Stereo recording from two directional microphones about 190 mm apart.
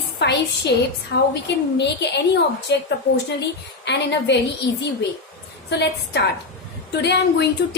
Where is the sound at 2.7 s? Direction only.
65° left (ahead or behind).